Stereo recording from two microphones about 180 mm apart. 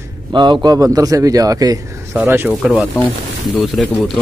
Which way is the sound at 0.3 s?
25° right (ahead or behind).